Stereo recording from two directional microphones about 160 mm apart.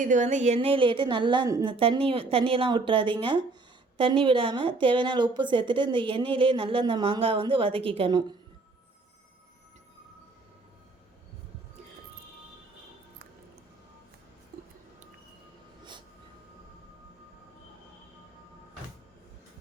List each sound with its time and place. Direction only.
0.0 s a woman's voice: 50° right (ahead or behind); by 1.7 s 25° right (ahead or behind)
1.7 s a woman's voice: 35° right (ahead or behind)
15.8 s train: 30° right (ahead or behind)